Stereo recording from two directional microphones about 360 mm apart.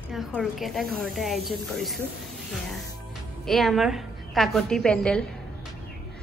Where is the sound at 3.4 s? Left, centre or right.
Centre.